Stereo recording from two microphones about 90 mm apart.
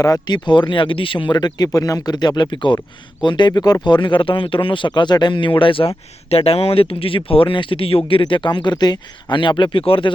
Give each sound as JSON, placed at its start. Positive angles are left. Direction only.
{"t": 0.0, "sound": "speech", "side_deg": 45}
{"t": 6.3, "sound": "speech", "side_deg": 90}
{"t": 7.3, "sound": "speech", "side_deg": 80}